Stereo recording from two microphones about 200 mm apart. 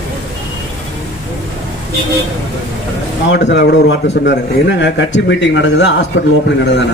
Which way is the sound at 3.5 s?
60° left (ahead or behind).